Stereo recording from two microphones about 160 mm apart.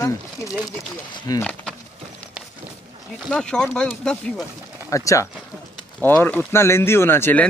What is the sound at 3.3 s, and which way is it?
Speech, 5° left (ahead or behind).